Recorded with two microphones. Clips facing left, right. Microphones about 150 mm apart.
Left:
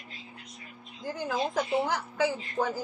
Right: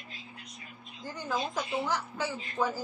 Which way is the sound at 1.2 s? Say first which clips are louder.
Left 3 dB; 55° left (ahead or behind).